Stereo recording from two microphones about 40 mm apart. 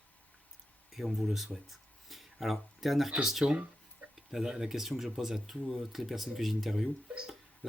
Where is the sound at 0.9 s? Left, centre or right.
Centre.